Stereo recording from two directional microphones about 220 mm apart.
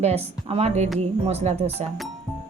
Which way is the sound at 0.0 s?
30° right (ahead or behind).